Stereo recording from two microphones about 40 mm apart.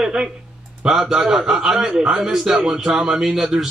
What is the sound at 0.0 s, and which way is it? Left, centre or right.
Speech, centre.